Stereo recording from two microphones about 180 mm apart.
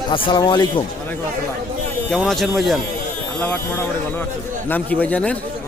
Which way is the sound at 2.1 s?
Centre (ahead or behind).